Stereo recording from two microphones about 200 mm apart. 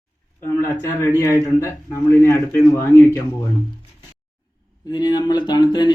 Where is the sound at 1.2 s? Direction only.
15° left (ahead or behind).